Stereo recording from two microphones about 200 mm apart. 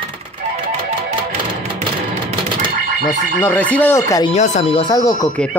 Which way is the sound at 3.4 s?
10° left (ahead or behind).